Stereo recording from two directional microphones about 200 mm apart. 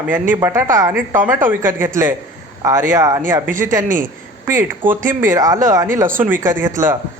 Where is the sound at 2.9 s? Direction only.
15° right (ahead or behind).